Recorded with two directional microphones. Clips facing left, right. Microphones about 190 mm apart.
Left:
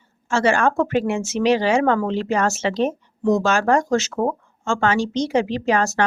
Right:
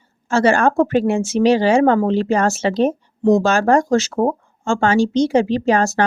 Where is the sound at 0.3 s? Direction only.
35° right (ahead or behind).